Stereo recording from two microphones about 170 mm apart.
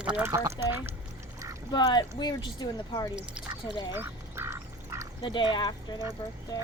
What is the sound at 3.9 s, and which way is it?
Duck, 15° right (ahead or behind).